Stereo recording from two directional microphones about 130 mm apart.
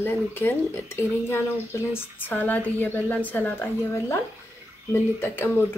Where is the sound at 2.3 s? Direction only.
15° left (ahead or behind).